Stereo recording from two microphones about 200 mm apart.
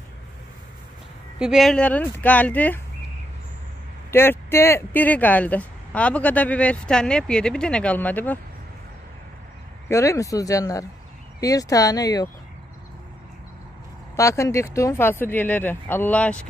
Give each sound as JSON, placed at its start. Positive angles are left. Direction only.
{"t": 1.4, "sound": "speech", "side_deg": 0}
{"t": 4.1, "sound": "speech", "side_deg": 10}
{"t": 9.8, "sound": "speech", "side_deg": 15}
{"t": 14.1, "sound": "speech", "side_deg": 15}